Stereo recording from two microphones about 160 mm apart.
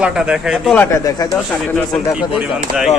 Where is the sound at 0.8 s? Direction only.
20° left (ahead or behind).